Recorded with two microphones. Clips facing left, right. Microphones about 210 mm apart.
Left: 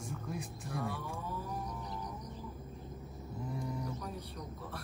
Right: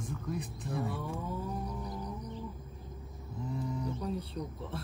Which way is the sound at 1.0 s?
25° right (ahead or behind).